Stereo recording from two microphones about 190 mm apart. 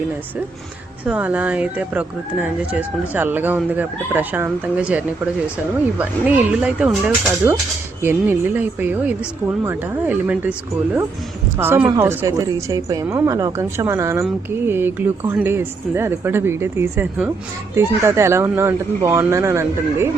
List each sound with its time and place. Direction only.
1.0 s speech: 5° right (ahead or behind)
11.5 s speech: 10° right (ahead or behind)